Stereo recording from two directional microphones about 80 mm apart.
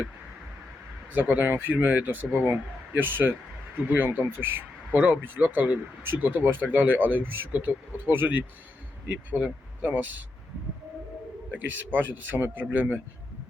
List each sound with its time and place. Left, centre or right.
1.1 s speech: right
11.9 s speech: right